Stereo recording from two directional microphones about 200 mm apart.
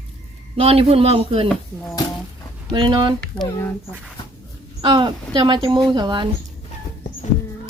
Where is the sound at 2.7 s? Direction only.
25° right (ahead or behind).